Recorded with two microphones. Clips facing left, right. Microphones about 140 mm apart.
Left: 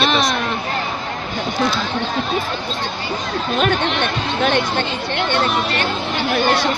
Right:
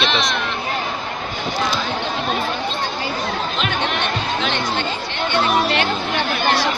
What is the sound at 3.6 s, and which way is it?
Speech, 50° left (ahead or behind).